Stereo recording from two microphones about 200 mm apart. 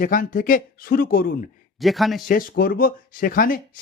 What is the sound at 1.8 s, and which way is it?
Speech, centre (ahead or behind).